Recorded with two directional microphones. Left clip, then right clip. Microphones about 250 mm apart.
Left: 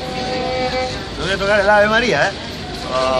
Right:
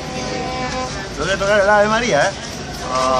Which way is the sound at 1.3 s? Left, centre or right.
Centre.